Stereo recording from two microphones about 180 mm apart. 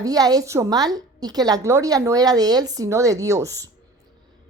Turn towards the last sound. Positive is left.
turn(degrees=-15)  # may be behind; listen again after turning